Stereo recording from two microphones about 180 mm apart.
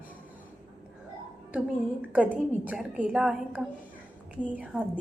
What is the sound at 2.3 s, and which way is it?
A woman's voice, 10° right (ahead or behind).